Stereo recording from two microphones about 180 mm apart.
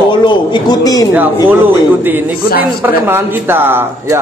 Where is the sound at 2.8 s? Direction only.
10° right (ahead or behind).